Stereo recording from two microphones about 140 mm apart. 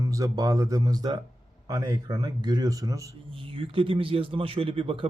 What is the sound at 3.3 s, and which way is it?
Speech, 40° right (ahead or behind).